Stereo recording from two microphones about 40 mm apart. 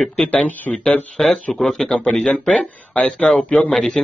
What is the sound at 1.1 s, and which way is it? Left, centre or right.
Speech, centre.